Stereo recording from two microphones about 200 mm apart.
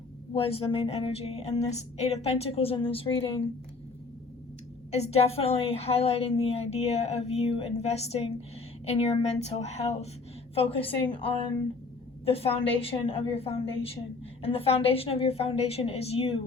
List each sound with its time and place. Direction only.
0.3 s a woman's voice: 30° left (ahead or behind)
4.9 s a woman's voice: 30° left (ahead or behind)